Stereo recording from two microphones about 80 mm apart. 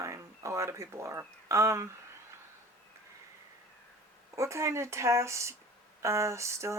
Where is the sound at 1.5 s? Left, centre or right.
Right.